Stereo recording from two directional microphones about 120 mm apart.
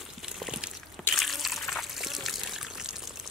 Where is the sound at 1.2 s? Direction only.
Centre (ahead or behind).